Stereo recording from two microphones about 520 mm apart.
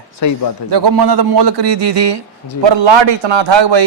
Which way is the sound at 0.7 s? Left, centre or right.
Right.